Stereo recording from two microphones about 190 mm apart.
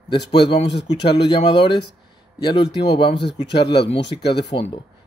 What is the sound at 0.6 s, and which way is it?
Speech, 65° left (ahead or behind).